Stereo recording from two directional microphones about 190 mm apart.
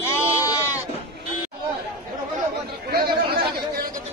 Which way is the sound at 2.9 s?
55° right (ahead or behind).